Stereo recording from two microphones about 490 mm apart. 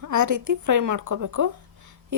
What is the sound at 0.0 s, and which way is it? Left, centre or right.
A woman's voice, right.